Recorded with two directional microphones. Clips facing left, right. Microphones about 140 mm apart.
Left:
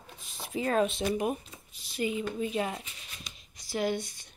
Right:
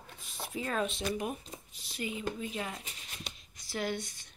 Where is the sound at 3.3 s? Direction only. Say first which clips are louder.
Right 4 dB; 60° right (ahead or behind).